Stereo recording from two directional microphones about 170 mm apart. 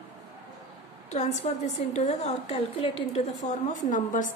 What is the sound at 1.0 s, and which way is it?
A woman's voice, 40° left (ahead or behind).